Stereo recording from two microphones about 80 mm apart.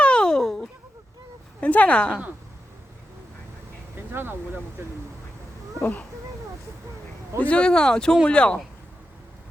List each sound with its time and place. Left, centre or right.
0.0 s a sound: centre
1.6 s speech: centre
3.9 s speech: right
5.8 s speech: left
7.3 s speech: centre